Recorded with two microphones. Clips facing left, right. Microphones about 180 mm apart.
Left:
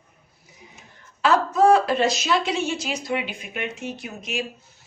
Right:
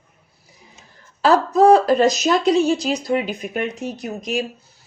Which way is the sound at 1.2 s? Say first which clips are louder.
Right 4 dB; 35° right (ahead or behind).